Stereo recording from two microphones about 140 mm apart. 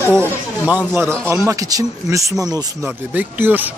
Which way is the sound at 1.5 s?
25° right (ahead or behind).